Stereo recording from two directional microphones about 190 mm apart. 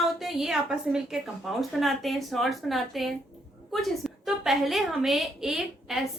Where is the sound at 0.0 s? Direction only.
Centre (ahead or behind).